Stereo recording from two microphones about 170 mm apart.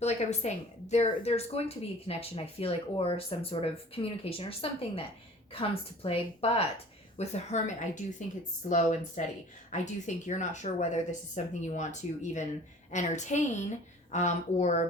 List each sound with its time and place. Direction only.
0.0 s a woman's voice: 40° left (ahead or behind)